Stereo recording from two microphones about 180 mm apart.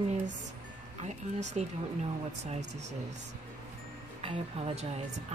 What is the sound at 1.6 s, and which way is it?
Speech, 40° right (ahead or behind).